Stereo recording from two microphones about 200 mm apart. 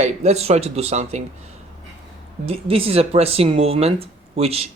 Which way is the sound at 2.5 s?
30° right (ahead or behind).